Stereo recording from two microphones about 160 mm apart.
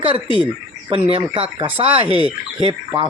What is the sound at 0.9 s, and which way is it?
Speech, 35° right (ahead or behind).